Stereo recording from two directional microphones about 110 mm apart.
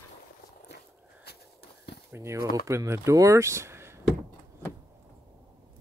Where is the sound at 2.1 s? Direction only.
30° right (ahead or behind).